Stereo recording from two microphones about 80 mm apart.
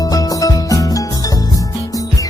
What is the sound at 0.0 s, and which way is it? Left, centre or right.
Music, left.